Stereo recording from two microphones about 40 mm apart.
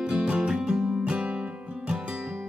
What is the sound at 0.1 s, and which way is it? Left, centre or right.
Music, right.